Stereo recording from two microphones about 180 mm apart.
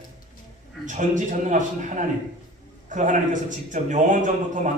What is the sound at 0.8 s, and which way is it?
A man's voice, 45° right (ahead or behind).